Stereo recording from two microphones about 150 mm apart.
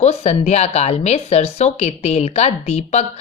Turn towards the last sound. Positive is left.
turn(degrees=50)  # may be behind; listen again after turning